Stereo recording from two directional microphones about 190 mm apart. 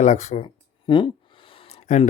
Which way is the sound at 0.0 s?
40° left (ahead or behind).